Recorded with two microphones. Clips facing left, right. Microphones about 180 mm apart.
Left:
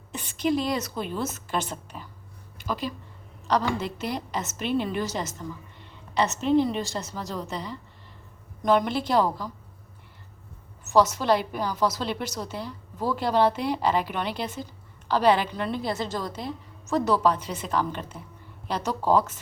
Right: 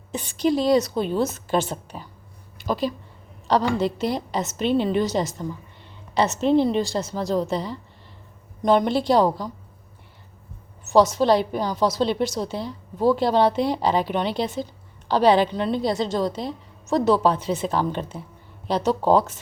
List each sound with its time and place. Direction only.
0.2 s a woman's voice: 35° right (ahead or behind)
10.9 s a woman's voice: 30° right (ahead or behind)